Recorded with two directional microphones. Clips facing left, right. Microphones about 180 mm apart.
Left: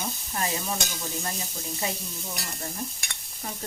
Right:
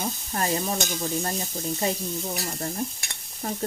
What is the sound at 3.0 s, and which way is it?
Stir, 45° right (ahead or behind).